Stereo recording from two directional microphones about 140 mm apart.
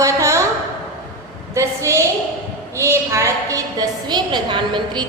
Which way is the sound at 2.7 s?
20° right (ahead or behind).